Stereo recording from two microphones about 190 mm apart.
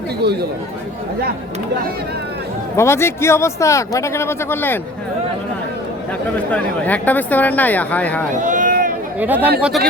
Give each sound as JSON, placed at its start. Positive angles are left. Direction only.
{"t": 2.7, "sound": "speech", "side_deg": 15}
{"t": 6.5, "sound": "speech", "side_deg": 10}
{"t": 8.4, "sound": "run", "side_deg": -45}
{"t": 9.1, "sound": "speech", "side_deg": -10}